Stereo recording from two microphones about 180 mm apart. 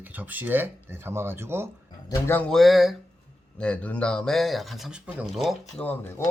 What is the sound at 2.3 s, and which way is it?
Speech, 5° left (ahead or behind).